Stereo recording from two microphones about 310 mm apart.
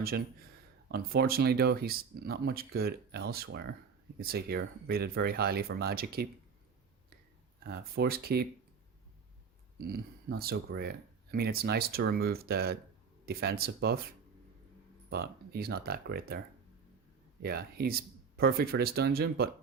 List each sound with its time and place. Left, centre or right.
0.0 s speech: right
7.6 s speech: right
9.7 s speech: right
15.1 s speech: right
17.4 s speech: right